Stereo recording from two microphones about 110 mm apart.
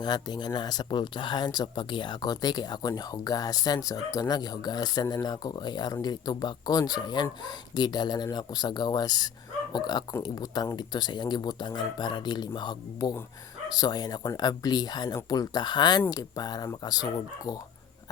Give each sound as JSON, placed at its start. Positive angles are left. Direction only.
{"t": 0.0, "sound": "speech", "side_deg": 40}